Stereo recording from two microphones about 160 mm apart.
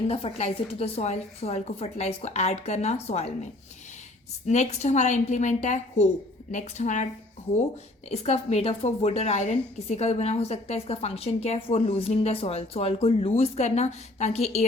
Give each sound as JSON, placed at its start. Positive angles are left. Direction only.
{"t": 0.1, "sound": "a woman's voice", "side_deg": 40}
{"t": 4.4, "sound": "a woman's voice", "side_deg": 45}
{"t": 8.1, "sound": "a woman's voice", "side_deg": 40}